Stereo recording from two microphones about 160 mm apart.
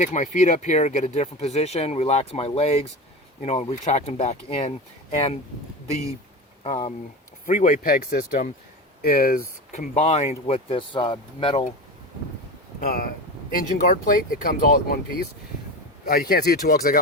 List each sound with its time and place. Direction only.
0.0 s speech: 50° left (ahead or behind)
6.7 s speech: 45° left (ahead or behind)
9.0 s speech: 75° left (ahead or behind)
9.7 s speech: 50° left (ahead or behind)
13.5 s speech: 60° left (ahead or behind)
16.0 s speech: 70° left (ahead or behind)